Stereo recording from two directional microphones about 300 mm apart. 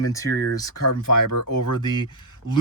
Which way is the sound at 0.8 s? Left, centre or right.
Left.